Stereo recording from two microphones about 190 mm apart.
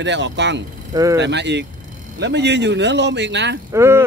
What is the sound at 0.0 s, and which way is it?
Speech, 70° right (ahead or behind).